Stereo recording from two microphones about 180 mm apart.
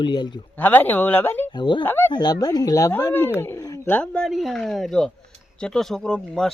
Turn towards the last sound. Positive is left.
turn(degrees=5)  # may be behind; listen again after turning